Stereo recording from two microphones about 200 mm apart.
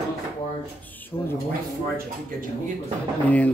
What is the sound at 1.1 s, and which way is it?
Speech, 15° left (ahead or behind).